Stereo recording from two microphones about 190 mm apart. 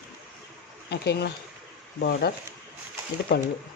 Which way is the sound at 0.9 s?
60° left (ahead or behind).